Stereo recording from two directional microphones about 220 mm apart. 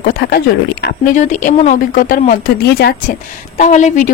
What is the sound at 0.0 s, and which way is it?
A woman's voice, 45° left (ahead or behind).